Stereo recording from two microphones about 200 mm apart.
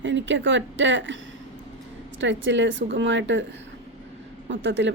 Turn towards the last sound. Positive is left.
turn(degrees=-65)  # may be behind; listen again after turning